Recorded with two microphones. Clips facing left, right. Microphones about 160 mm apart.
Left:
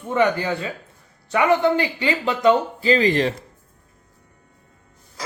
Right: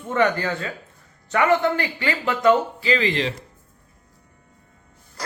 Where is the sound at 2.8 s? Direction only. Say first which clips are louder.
Left 4 dB; 40° left (ahead or behind).